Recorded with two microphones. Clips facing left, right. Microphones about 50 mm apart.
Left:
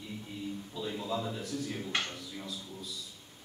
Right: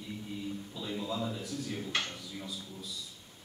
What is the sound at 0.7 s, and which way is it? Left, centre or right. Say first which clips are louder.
A man's voice: left 3 dB; centre.